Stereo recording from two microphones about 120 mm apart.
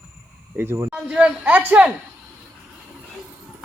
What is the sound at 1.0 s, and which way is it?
Speech, 10° right (ahead or behind).